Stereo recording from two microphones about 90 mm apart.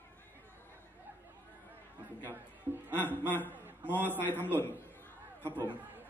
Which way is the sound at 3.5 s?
20° right (ahead or behind).